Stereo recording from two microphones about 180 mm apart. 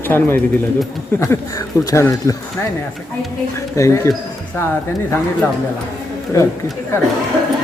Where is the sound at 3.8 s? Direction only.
15° left (ahead or behind).